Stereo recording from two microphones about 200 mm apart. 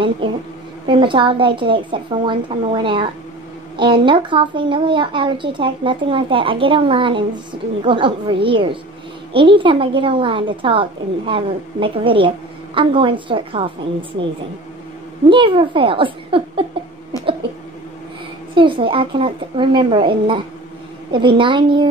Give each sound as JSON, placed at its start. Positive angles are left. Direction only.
{"t": 0.2, "sound": "speech", "side_deg": -25}
{"t": 15.2, "sound": "speech", "side_deg": -25}
{"t": 18.5, "sound": "speech", "side_deg": -25}